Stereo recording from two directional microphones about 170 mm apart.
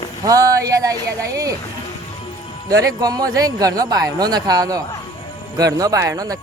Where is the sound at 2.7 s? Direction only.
20° right (ahead or behind).